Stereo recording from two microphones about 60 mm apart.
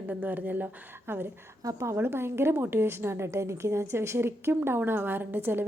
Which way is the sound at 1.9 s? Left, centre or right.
Right.